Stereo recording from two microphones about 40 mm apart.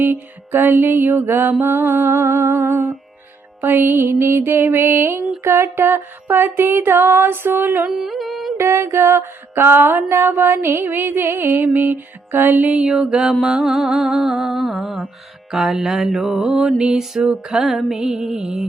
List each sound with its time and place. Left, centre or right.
0.0 s music: right
1.6 s mantra: right
3.6 s mantra: right
5.4 s music: right
7.9 s carnatic music: centre
8.5 s mantra: right
10.8 s music: right
12.8 s mantra: centre